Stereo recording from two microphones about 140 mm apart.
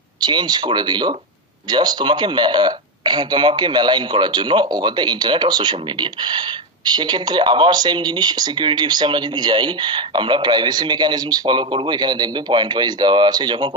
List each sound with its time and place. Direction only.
0.2 s speech: 30° right (ahead or behind)